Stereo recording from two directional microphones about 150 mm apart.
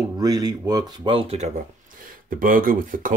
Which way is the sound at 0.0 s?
25° right (ahead or behind).